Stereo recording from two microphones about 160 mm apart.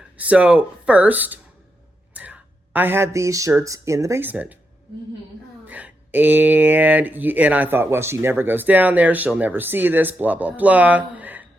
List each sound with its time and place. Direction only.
0.2 s speech: 10° right (ahead or behind)
5.6 s speech: 10° right (ahead or behind)